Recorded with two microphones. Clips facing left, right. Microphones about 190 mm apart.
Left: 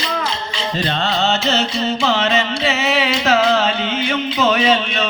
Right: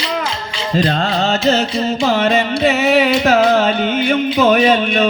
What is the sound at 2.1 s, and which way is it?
Music, 55° right (ahead or behind).